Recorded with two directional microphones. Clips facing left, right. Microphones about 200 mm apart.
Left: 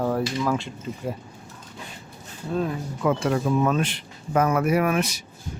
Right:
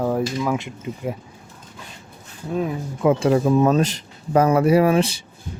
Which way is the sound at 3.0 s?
30° right (ahead or behind).